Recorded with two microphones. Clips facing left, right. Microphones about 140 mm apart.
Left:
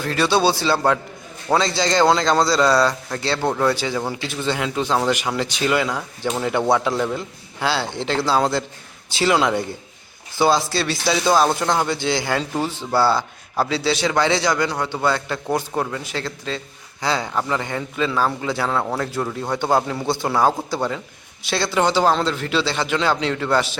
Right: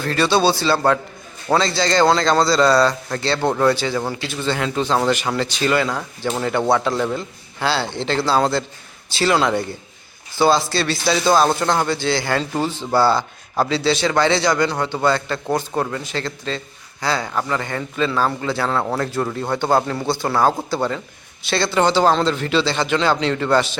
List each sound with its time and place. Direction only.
0.0 s a man's voice: 10° left (ahead or behind)
18.8 s a man's voice: 5° right (ahead or behind)